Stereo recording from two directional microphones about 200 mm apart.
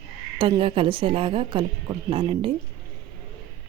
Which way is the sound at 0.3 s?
25° right (ahead or behind).